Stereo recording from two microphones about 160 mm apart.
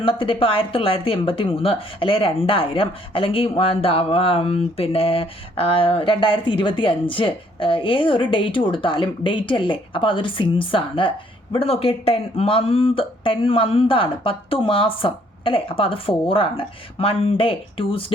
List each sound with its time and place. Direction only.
0.0 s speech: 35° left (ahead or behind)